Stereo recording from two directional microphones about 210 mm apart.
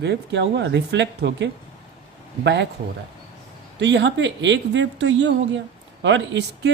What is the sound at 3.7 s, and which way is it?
Speech, 55° right (ahead or behind).